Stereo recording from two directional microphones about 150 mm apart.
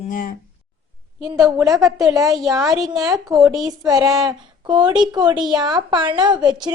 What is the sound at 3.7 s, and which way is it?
A woman's voice, 25° right (ahead or behind).